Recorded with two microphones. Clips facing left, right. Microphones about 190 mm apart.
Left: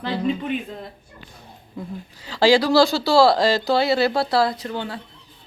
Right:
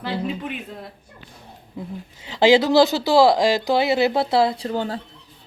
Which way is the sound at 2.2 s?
20° right (ahead or behind).